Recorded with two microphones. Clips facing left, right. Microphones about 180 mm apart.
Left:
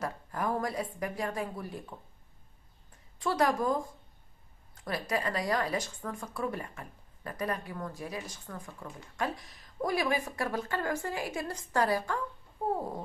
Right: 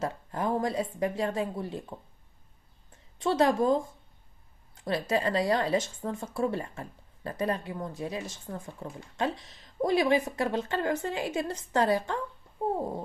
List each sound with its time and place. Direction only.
0.0 s a woman's voice: 25° right (ahead or behind)
3.2 s a woman's voice: 25° right (ahead or behind)
4.8 s a woman's voice: 25° right (ahead or behind)
12.7 s a sound: 25° right (ahead or behind)